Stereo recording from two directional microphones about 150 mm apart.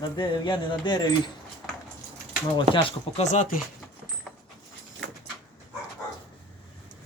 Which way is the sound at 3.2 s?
55° left (ahead or behind).